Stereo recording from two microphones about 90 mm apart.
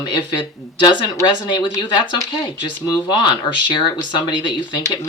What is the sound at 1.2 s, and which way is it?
Speech, 55° left (ahead or behind).